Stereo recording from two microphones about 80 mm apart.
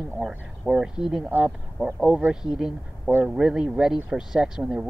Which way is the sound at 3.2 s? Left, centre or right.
Centre.